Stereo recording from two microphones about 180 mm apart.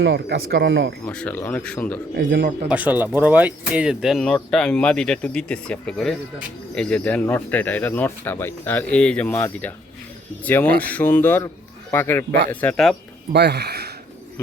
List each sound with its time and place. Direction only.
0.0 s speech: 75° right (ahead or behind)
1.0 s speech: 10° left (ahead or behind)
2.1 s speech: 85° right
2.6 s speech: 10° right (ahead or behind)
13.3 s speech: 65° right (ahead or behind)